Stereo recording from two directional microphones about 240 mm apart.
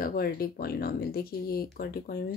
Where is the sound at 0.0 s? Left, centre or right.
Left.